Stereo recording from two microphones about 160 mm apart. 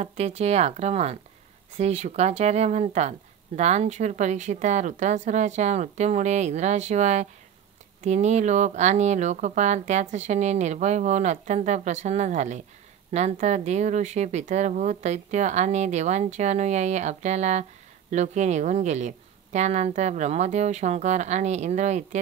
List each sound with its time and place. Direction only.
0.0 s speech: 40° right (ahead or behind)